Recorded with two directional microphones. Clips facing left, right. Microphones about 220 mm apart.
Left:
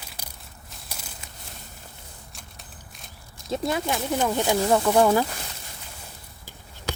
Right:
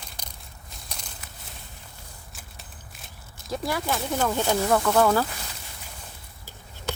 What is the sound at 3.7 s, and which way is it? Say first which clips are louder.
Speech: left 1 dB; 20° left (ahead or behind).